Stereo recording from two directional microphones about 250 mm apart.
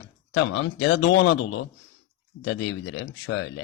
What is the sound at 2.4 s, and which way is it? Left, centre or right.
Speech, left.